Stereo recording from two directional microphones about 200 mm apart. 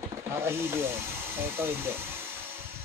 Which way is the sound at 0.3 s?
10° right (ahead or behind).